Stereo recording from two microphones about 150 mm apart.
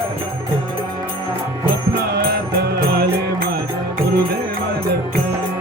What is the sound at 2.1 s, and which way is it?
Music, 90° right.